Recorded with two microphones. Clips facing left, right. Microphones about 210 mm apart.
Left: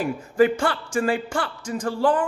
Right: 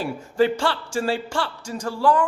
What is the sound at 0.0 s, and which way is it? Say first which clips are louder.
Speech: left 2 dB; 50° left (ahead or behind).